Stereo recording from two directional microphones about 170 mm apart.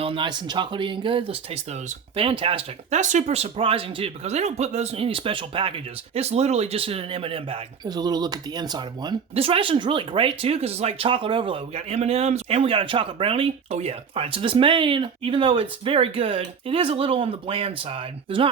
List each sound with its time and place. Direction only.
0.0 s speech: 30° right (ahead or behind)
3.0 s speech: 45° right (ahead or behind)